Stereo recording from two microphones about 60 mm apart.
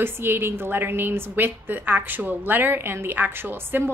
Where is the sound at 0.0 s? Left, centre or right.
Right.